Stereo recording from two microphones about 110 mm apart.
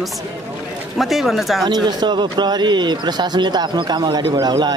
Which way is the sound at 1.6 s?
40° right (ahead or behind).